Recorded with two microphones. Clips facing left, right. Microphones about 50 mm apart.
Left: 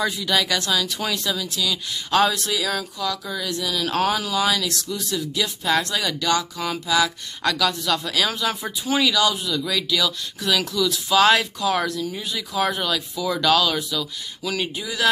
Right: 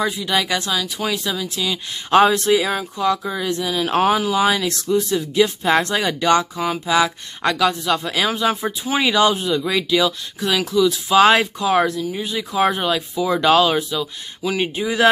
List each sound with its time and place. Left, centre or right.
0.0 s speech: centre